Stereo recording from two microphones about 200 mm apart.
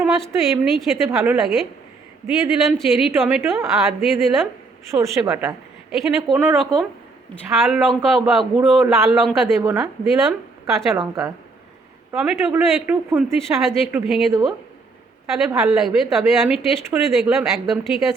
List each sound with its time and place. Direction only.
0.0 s speech: centre (ahead or behind)
4.9 s speech: 15° right (ahead or behind)
10.9 s speech: 15° right (ahead or behind)
12.1 s speech: centre (ahead or behind)
15.3 s speech: centre (ahead or behind)